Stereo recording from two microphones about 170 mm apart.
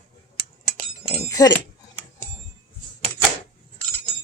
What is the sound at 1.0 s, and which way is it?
Chink, 40° left (ahead or behind).